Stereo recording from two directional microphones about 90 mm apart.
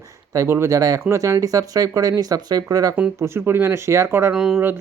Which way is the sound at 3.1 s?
30° right (ahead or behind).